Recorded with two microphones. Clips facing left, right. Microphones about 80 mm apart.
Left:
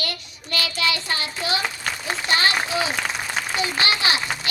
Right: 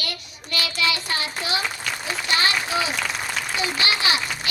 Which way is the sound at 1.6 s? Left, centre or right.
Left.